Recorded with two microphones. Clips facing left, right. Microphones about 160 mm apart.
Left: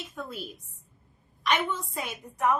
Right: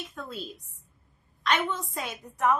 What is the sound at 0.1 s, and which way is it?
A woman's voice, 10° left (ahead or behind).